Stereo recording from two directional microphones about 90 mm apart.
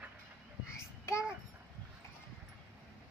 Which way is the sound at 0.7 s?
30° left (ahead or behind).